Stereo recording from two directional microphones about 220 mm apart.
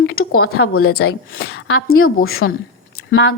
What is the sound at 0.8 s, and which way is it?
Speech, 45° left (ahead or behind).